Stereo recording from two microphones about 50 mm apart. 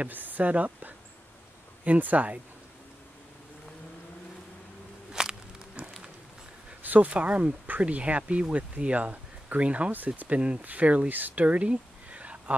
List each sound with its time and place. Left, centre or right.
0.0 s speech: right
5.2 s a sound: centre
6.8 s speech: right